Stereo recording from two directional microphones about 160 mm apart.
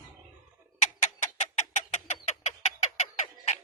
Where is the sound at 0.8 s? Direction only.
45° left (ahead or behind).